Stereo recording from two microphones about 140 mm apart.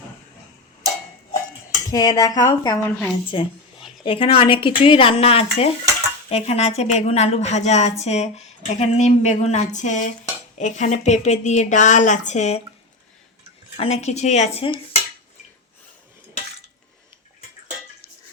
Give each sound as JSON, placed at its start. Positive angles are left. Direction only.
{"t": 1.9, "sound": "a woman's voice", "side_deg": 25}
{"t": 3.3, "sound": "a woman's voice", "side_deg": 40}
{"t": 13.7, "sound": "speech", "side_deg": 50}